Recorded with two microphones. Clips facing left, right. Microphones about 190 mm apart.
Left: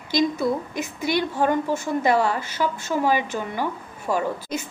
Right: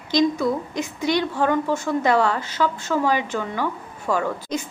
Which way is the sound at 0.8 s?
5° left (ahead or behind).